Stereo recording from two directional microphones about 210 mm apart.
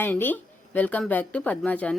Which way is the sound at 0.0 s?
10° left (ahead or behind).